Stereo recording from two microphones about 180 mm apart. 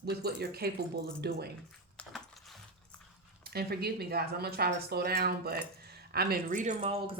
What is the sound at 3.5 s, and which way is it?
Speech, 60° right (ahead or behind).